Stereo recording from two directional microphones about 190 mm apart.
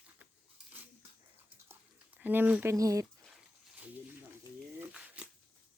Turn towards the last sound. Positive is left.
turn(degrees=-5)  # may be behind; listen again after turning